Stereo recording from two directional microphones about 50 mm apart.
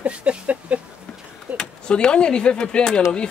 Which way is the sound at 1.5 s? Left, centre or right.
Centre.